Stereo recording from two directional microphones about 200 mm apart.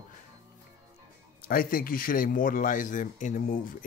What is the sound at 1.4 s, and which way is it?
Speech, 45° left (ahead or behind).